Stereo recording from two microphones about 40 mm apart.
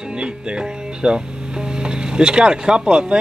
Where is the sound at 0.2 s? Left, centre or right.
Right.